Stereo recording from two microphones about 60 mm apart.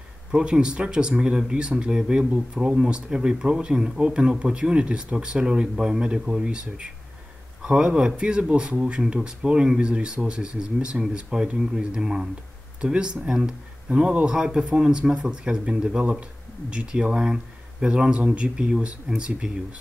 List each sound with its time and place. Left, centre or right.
0.3 s speech: centre